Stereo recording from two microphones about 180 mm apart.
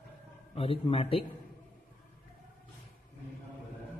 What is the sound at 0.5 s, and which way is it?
Speech, 30° left (ahead or behind).